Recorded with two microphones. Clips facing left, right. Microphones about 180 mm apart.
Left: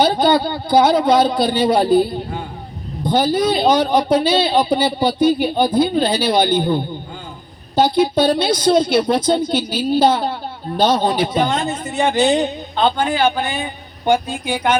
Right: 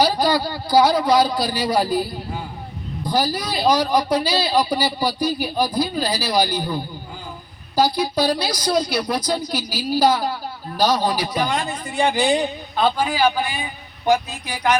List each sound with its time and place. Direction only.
0.0 s a man's voice: 25° left (ahead or behind)